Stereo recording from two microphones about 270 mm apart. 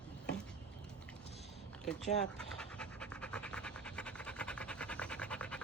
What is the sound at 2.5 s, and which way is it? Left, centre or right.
Pant, centre.